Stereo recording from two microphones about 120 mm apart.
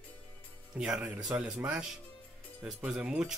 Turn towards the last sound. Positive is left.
turn(degrees=-5)  # may be behind; listen again after turning